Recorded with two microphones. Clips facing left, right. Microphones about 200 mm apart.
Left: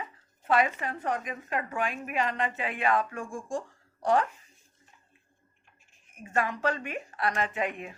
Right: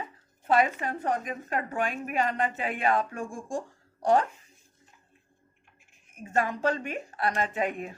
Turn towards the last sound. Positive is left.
turn(degrees=-40)  # may be behind; listen again after turning